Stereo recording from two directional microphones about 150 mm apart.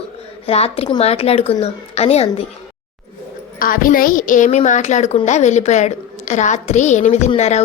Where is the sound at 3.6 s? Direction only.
70° left (ahead or behind); by 7.6 s 50° left (ahead or behind).